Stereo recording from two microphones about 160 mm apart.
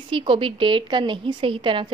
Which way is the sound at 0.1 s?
35° right (ahead or behind).